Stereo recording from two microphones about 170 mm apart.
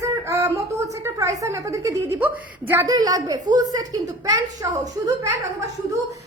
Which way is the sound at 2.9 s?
20° right (ahead or behind).